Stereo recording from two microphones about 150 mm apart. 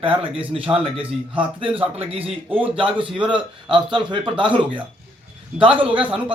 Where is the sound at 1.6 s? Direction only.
40° right (ahead or behind).